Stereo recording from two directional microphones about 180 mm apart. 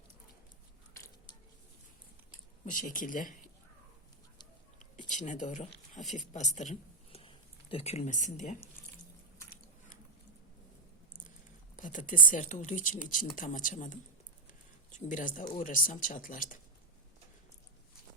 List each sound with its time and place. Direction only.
2.7 s speech: 50° left (ahead or behind)
4.9 s speech: 45° left (ahead or behind)
7.1 s a sound: 30° left (ahead or behind)
11.8 s speech: 45° left (ahead or behind)